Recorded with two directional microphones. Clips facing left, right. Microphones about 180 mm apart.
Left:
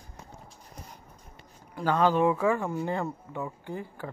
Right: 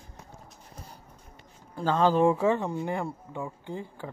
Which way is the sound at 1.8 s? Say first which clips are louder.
Right 1 dB; 30° right (ahead or behind).